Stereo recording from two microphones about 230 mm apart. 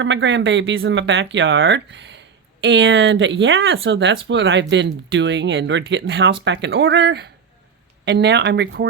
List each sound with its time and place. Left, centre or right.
0.0 s speech: right